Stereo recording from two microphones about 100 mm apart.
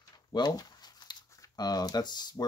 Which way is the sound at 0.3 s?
45° left (ahead or behind).